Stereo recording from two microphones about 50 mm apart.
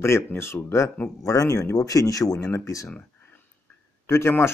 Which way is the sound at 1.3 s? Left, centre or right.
Left.